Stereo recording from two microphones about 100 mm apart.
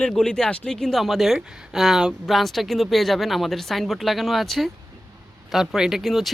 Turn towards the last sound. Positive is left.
turn(degrees=0)  # may be behind; listen again after turning